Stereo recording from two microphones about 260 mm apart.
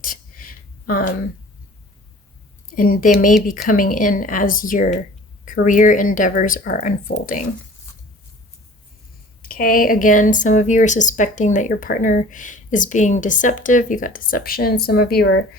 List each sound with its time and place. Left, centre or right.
0.0 s a sound: left
2.6 s a woman's voice: left
9.4 s speech: left